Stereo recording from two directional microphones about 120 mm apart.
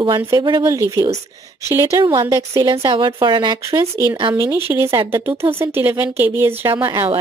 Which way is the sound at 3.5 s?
25° right (ahead or behind).